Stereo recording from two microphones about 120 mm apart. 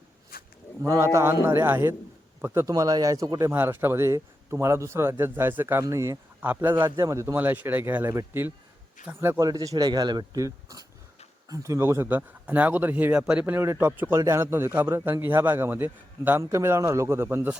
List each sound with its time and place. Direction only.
0.8 s speech: 20° right (ahead or behind)
3.5 s speech: 15° right (ahead or behind)
9.4 s a man's voice: 30° right (ahead or behind); by 17.6 s 15° right (ahead or behind)